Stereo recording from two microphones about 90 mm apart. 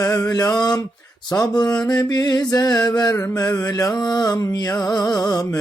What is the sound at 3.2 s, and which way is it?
Mantra, 35° left (ahead or behind).